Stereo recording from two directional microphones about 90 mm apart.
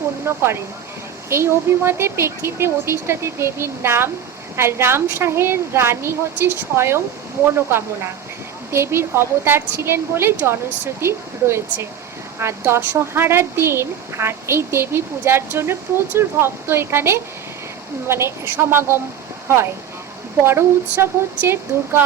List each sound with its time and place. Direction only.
0.3 s speech: 30° right (ahead or behind)
20.4 s speech: 25° right (ahead or behind)